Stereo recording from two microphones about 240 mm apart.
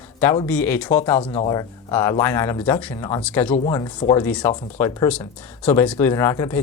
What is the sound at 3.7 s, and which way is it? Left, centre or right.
Speech, centre.